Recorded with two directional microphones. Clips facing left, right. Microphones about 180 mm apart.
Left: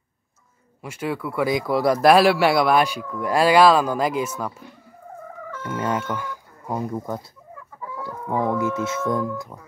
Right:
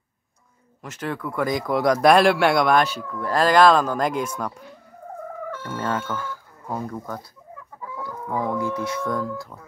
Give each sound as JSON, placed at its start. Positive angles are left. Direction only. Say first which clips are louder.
{"t": 0.8, "sound": "speech", "louder": "left 2 dB", "side_deg": 10}
{"t": 5.8, "sound": "speech", "louder": "left 2 dB", "side_deg": 15}